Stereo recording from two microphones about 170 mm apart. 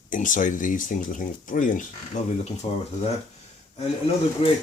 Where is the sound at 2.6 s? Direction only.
40° left (ahead or behind).